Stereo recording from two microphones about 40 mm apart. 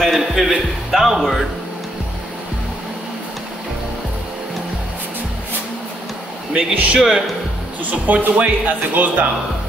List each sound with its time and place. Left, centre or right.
0.0 s a man's voice: centre
6.5 s speech: right
7.0 s speech: centre
7.8 s speech: right